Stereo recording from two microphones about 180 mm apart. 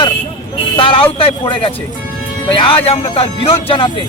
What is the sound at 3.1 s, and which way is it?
Music, 35° left (ahead or behind).